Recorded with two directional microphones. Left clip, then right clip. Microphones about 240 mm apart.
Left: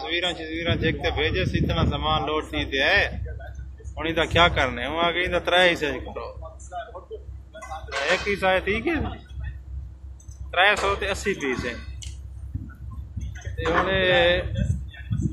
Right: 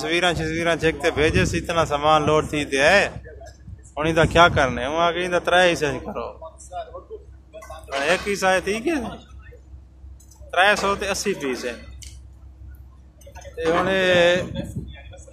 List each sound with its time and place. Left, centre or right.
0.0 s speech: right; by 6.3 s centre
8.0 s speech: centre
10.5 s speech: centre
13.8 s speech: right